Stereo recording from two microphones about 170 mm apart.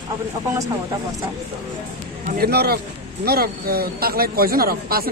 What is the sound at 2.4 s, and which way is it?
A man's voice, 70° right (ahead or behind).